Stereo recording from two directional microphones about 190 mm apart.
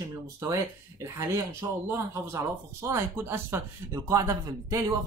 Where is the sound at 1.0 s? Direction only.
15° right (ahead or behind).